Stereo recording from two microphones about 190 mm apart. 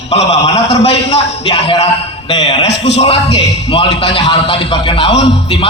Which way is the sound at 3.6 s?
30° left (ahead or behind).